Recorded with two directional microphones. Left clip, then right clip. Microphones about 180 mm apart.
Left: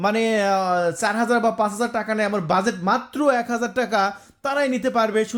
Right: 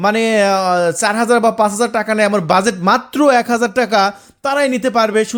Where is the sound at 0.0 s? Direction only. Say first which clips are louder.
Right 7 dB; 30° right (ahead or behind).